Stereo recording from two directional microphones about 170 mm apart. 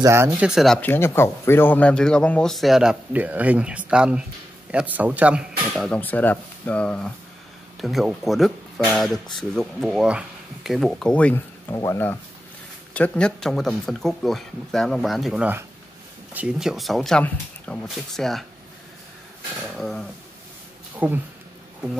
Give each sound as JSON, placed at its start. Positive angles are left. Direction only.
{"t": 0.0, "sound": "speech", "side_deg": -15}
{"t": 0.3, "sound": "speech", "side_deg": -5}
{"t": 5.9, "sound": "speech", "side_deg": 10}
{"t": 19.8, "sound": "speech", "side_deg": 0}
{"t": 20.9, "sound": "speech", "side_deg": -10}